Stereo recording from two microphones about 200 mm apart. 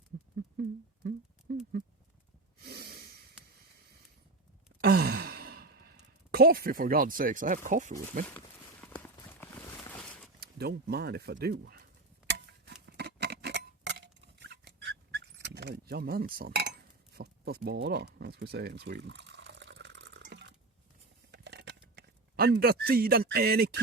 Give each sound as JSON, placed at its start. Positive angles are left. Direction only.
{"t": 1.5, "sound": "horse", "side_deg": -55}
{"t": 2.6, "sound": "snort", "side_deg": -50}
{"t": 4.8, "sound": "sigh", "side_deg": -50}
{"t": 6.3, "sound": "speech", "side_deg": -50}
{"t": 9.2, "sound": "a sound", "side_deg": 10}
{"t": 10.4, "sound": "speech", "side_deg": -55}
{"t": 12.8, "sound": "a sound", "side_deg": -55}